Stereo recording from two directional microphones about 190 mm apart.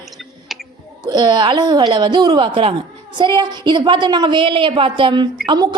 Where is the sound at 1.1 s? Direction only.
20° right (ahead or behind).